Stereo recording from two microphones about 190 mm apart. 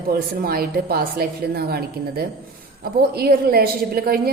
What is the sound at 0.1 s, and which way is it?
Speech, 50° right (ahead or behind).